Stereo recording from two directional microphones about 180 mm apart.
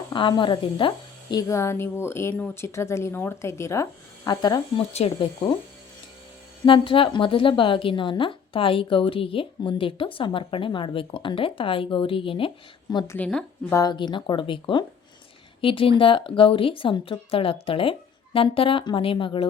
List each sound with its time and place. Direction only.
0.1 s a woman's voice: 25° left (ahead or behind)
6.7 s a woman's voice: 30° left (ahead or behind)
13.1 s a woman's voice: 5° left (ahead or behind)
13.7 s a woman's voice: 25° left (ahead or behind)